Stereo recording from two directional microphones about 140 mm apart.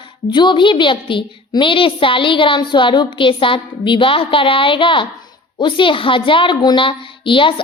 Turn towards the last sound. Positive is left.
turn(degrees=35)  # may be behind; listen again after turning